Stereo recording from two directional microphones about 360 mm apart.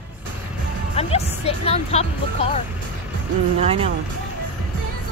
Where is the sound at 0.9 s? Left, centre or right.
Centre.